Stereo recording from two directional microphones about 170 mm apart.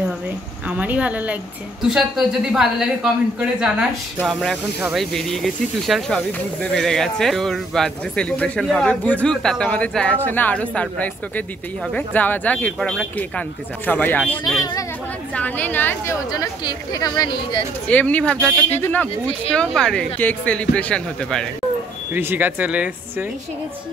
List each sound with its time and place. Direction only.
0.7 s a woman's voice: 10° right (ahead or behind); by 14.4 s 10° left (ahead or behind)
14.6 s a woman's voice: 20° left (ahead or behind)
15.3 s a woman's voice: 10° left (ahead or behind); by 17.6 s 25° left (ahead or behind)
17.8 s a man's voice: 10° left (ahead or behind)
22.1 s speech: 10° right (ahead or behind)